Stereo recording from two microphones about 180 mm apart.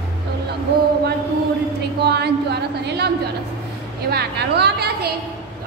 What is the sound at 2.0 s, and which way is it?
Speech, 65° right (ahead or behind).